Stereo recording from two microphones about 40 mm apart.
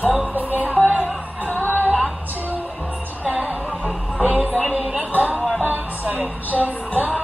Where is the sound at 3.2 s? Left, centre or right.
Right.